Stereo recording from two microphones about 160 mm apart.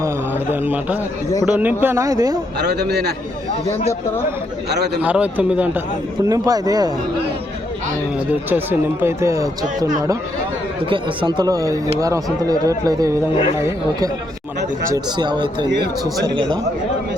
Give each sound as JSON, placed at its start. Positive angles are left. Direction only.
{"t": 0.5, "sound": "speech", "side_deg": -10}
{"t": 2.6, "sound": "speech", "side_deg": -90}
{"t": 4.7, "sound": "speech", "side_deg": -90}
{"t": 5.0, "sound": "speech", "side_deg": -10}
{"t": 6.2, "sound": "speech", "side_deg": -20}
{"t": 8.4, "sound": "speech", "side_deg": -10}